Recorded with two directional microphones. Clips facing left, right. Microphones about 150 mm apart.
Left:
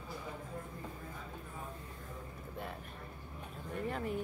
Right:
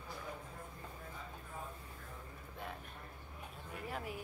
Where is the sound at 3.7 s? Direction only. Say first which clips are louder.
Left 6 dB; 5° right (ahead or behind).